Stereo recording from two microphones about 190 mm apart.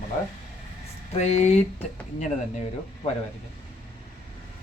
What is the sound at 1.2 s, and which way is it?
Speech, 35° left (ahead or behind).